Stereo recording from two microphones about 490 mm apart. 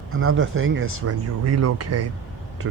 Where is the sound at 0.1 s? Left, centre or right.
Right.